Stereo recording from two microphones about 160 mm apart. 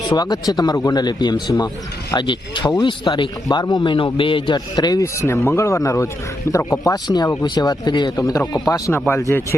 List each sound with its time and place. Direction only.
0.1 s speech: 25° left (ahead or behind)